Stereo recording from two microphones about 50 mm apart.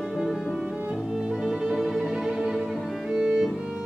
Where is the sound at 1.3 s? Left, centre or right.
Centre.